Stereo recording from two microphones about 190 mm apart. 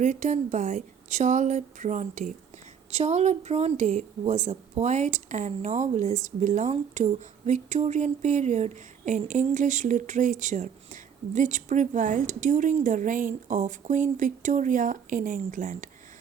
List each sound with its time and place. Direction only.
0.0 s speech: 40° right (ahead or behind)